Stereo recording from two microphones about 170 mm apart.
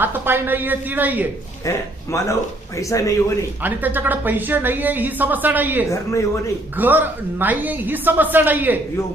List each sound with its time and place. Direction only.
0.0 s speech: 10° right (ahead or behind)
2.1 s speech: 20° left (ahead or behind)
3.6 s a woman's voice: 10° right (ahead or behind)
5.9 s speech: 15° left (ahead or behind)
6.7 s a woman's voice: 10° right (ahead or behind)